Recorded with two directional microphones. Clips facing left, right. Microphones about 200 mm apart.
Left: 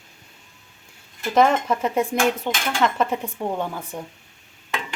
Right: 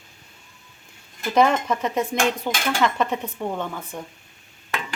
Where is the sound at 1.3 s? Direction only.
Centre (ahead or behind).